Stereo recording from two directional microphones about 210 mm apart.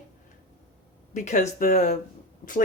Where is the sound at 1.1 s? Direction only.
35° left (ahead or behind).